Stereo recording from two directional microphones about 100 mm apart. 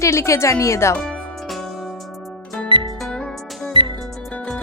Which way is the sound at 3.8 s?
55° right (ahead or behind).